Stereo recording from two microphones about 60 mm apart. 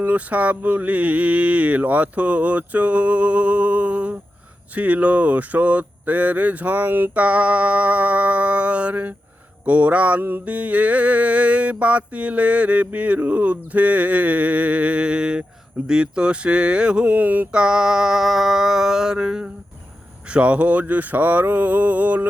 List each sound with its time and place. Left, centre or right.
0.0 s mantra: right
7.2 s mantra: right
17.1 s mantra: right
17.5 s mantra: centre